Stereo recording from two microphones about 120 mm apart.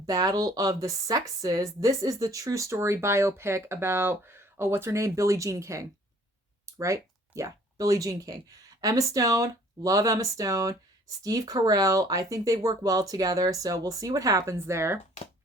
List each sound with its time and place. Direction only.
0.0 s speech: 30° right (ahead or behind)